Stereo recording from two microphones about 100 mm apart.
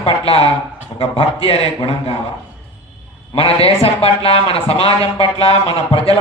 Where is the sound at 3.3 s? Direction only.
75° left (ahead or behind).